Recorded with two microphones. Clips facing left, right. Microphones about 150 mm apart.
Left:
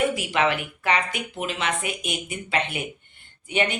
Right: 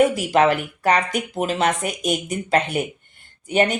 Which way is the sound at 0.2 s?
40° right (ahead or behind).